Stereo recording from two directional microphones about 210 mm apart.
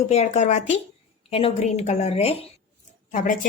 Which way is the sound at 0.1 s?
30° left (ahead or behind).